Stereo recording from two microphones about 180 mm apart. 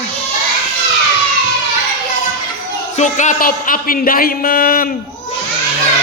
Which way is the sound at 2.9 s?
40° left (ahead or behind).